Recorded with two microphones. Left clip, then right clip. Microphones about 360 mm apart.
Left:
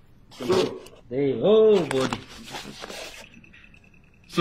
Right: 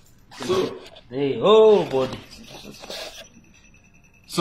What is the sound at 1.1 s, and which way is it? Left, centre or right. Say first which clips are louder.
Speech: right 3 dB; right.